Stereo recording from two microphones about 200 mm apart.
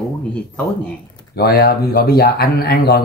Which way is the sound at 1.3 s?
50° left (ahead or behind).